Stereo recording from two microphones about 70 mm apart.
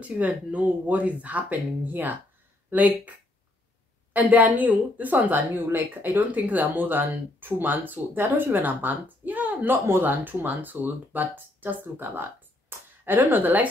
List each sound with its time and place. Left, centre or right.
0.0 s speech: centre